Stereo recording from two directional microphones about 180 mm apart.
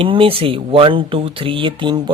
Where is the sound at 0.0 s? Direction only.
30° right (ahead or behind).